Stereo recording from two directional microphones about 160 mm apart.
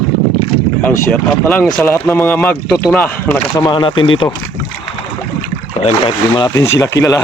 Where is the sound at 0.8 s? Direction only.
10° left (ahead or behind).